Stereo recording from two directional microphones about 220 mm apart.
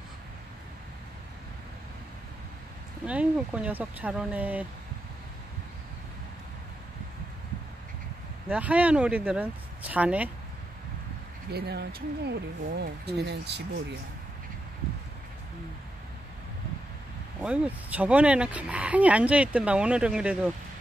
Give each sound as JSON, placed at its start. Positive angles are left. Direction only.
{"t": 3.1, "sound": "speech", "side_deg": -5}
{"t": 8.5, "sound": "speech", "side_deg": -5}
{"t": 11.5, "sound": "speech", "side_deg": -50}
{"t": 17.4, "sound": "speech", "side_deg": -5}